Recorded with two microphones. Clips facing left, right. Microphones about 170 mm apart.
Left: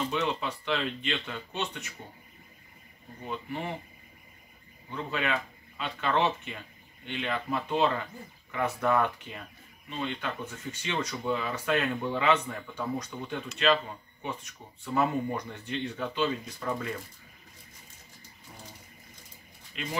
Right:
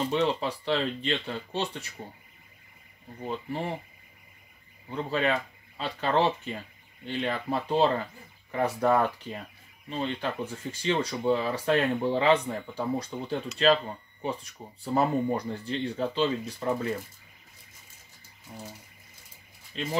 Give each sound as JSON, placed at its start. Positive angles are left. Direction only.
{"t": 0.1, "sound": "speech", "side_deg": -30}
{"t": 3.3, "sound": "speech", "side_deg": -35}
{"t": 4.8, "sound": "speech", "side_deg": -35}
{"t": 19.7, "sound": "speech", "side_deg": -30}